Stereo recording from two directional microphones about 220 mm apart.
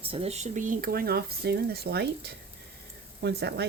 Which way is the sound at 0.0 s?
25° right (ahead or behind).